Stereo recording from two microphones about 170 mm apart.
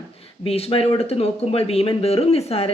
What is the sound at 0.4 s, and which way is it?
Speech, 35° left (ahead or behind).